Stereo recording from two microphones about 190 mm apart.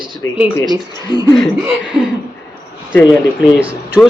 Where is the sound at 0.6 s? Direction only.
20° right (ahead or behind).